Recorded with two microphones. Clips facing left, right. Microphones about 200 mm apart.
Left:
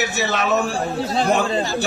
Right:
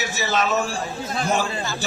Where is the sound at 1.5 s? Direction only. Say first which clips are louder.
Left 7 dB; 35° left (ahead or behind).